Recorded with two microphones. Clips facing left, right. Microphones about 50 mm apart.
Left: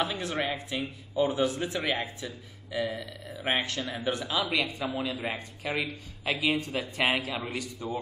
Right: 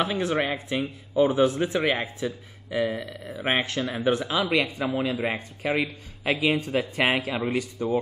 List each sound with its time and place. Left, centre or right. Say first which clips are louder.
0.0 s a man's voice: right 5 dB; right